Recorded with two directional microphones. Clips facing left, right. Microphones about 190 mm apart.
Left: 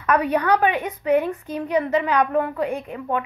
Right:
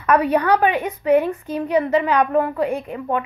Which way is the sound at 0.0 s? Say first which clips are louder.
Right 3 dB; 35° right (ahead or behind).